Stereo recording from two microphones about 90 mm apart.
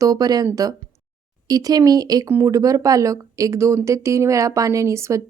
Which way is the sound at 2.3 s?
35° right (ahead or behind).